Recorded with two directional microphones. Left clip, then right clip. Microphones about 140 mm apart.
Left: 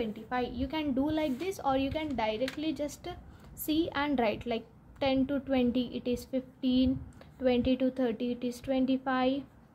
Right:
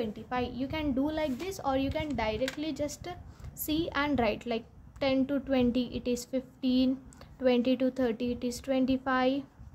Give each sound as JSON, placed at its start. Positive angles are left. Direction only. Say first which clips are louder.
{"t": 0.0, "sound": "a woman's voice", "louder": "even", "side_deg": -5}